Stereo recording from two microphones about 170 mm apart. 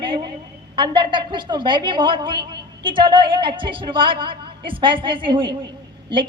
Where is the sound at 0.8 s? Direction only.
30° right (ahead or behind).